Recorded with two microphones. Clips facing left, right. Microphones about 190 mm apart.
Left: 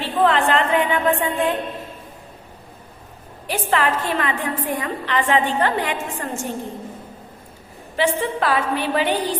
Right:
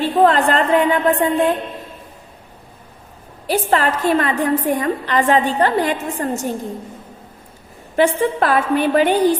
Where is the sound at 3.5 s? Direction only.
40° right (ahead or behind).